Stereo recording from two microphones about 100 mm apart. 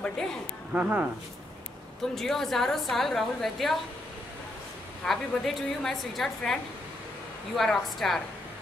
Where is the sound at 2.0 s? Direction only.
5° left (ahead or behind).